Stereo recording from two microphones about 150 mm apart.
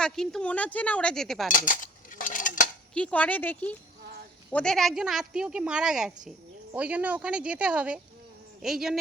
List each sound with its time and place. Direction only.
0.0 s speech: 5° left (ahead or behind)
1.5 s cutlery: 65° left (ahead or behind)
2.9 s speech: 10° left (ahead or behind)